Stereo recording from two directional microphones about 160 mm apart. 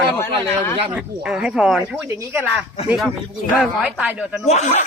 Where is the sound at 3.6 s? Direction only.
5° right (ahead or behind).